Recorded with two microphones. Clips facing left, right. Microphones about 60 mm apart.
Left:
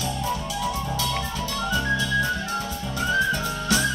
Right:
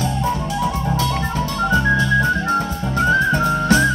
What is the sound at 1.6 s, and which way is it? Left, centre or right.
Music, right.